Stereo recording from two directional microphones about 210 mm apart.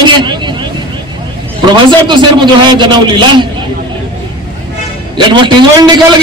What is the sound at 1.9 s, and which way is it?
A man's voice, 20° right (ahead or behind).